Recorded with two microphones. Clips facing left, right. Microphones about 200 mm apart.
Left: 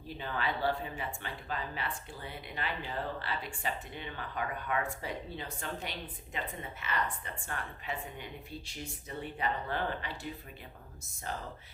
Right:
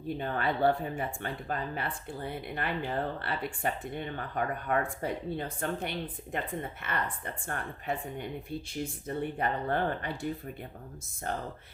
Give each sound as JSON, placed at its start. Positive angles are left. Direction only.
{"t": 0.2, "sound": "speech", "side_deg": -50}